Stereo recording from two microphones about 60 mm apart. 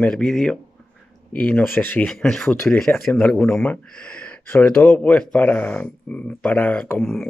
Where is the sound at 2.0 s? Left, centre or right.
Centre.